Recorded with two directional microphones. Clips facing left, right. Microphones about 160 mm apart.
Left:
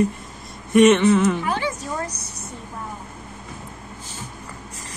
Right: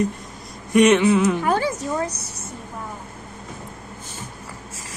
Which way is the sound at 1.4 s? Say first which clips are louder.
Right 4 dB; 45° right (ahead or behind).